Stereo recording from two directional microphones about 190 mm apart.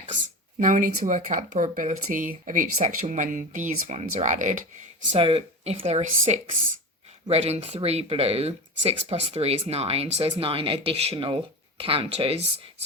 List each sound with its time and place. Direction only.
0.6 s speech: 40° right (ahead or behind)
5.1 s speech: 30° right (ahead or behind)